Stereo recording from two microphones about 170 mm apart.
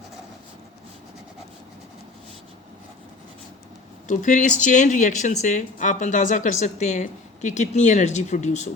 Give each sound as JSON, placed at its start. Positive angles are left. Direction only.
{"t": 4.1, "sound": "a woman's voice", "side_deg": 50}